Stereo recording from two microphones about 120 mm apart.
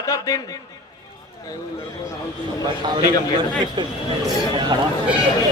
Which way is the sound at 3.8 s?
40° right (ahead or behind).